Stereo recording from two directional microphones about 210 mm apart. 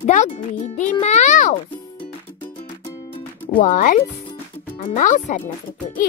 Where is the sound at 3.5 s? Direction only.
40° left (ahead or behind).